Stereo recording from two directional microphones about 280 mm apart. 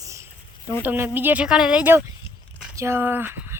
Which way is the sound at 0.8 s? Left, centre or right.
Centre.